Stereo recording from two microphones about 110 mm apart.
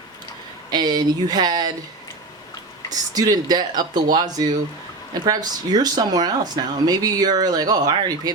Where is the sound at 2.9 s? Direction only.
35° right (ahead or behind).